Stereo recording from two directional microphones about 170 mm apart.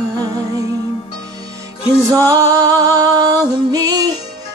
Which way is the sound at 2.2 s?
20° right (ahead or behind).